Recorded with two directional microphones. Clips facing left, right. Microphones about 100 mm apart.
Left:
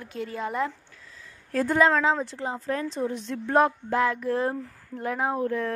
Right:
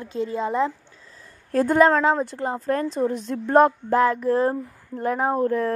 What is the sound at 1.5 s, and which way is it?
A woman's voice, 50° right (ahead or behind).